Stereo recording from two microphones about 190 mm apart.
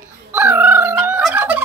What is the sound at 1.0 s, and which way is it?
Fowl, 10° right (ahead or behind).